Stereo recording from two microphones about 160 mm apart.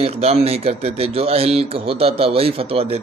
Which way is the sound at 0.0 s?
40° right (ahead or behind).